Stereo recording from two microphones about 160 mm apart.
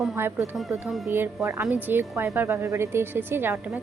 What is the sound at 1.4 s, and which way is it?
A woman's voice, 15° right (ahead or behind).